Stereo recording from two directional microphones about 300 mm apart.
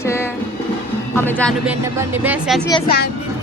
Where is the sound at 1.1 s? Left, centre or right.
Centre.